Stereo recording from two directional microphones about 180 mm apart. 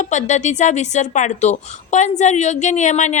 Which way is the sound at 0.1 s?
40° left (ahead or behind).